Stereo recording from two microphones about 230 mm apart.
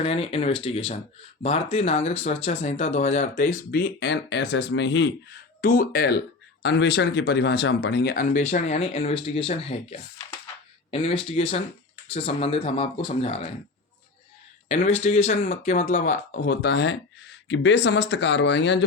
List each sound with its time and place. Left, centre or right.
0.0 s speech: left
5.6 s speech: left
14.7 s speech: left